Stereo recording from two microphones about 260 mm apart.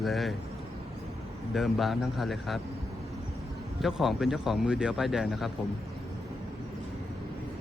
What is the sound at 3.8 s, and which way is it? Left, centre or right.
Speech, centre.